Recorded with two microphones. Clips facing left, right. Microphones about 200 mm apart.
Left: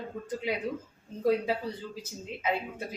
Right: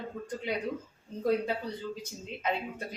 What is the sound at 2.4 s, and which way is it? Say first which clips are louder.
Speech: left 1 dB; 5° left (ahead or behind).